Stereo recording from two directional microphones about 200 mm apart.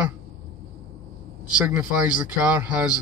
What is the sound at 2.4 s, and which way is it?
Speech, 5° right (ahead or behind).